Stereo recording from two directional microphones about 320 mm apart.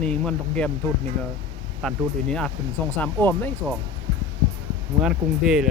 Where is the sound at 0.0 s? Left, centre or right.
Centre.